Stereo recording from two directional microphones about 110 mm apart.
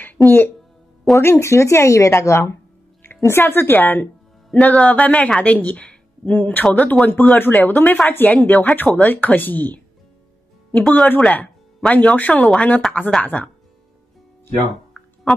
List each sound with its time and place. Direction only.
0.0 s music: 20° left (ahead or behind)
1.1 s a woman's voice: 25° left (ahead or behind)
15.0 s music: 5° left (ahead or behind)